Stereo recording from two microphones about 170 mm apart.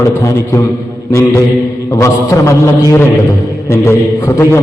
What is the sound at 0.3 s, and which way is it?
Speech, 15° left (ahead or behind).